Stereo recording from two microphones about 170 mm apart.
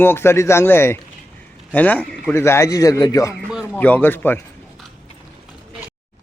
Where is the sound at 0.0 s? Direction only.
15° left (ahead or behind).